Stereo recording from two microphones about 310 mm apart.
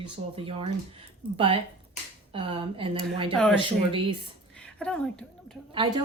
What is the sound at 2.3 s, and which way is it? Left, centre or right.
A woman's voice, centre.